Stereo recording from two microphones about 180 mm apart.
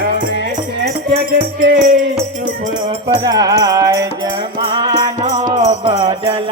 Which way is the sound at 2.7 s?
35° right (ahead or behind).